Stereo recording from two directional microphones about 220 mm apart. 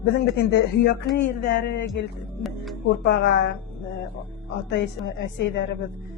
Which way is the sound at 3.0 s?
50° left (ahead or behind).